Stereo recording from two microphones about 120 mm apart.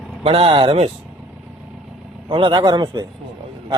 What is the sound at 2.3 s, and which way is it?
Speech, 40° right (ahead or behind).